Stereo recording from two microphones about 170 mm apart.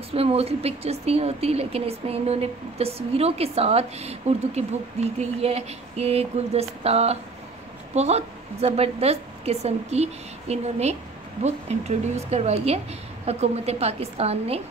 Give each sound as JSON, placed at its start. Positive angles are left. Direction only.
{"t": 0.1, "sound": "speech", "side_deg": -35}